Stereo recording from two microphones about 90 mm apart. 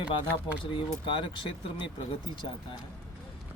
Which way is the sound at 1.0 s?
65° left (ahead or behind).